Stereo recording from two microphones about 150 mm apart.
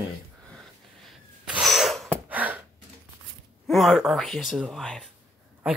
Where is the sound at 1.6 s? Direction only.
Centre (ahead or behind).